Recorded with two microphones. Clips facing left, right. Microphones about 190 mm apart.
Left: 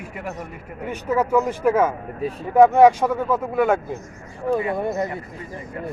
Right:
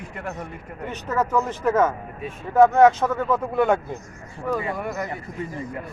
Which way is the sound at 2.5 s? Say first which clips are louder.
Left 2 dB; 10° left (ahead or behind).